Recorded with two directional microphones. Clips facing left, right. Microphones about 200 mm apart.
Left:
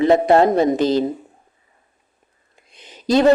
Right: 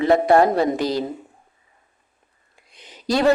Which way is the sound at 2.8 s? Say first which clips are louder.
Left 5 dB; 20° left (ahead or behind).